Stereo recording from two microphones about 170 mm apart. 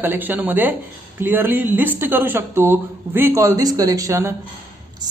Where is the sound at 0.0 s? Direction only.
10° right (ahead or behind).